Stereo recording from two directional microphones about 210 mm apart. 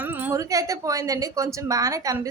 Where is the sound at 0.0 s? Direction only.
10° right (ahead or behind).